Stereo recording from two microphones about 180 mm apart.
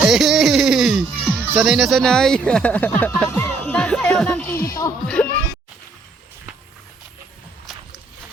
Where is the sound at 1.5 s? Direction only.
5° right (ahead or behind).